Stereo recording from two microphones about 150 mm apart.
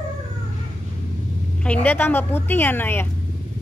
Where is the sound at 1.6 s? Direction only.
10° left (ahead or behind).